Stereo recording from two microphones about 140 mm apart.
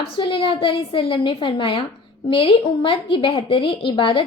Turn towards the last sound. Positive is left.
turn(degrees=35)  # may be behind; listen again after turning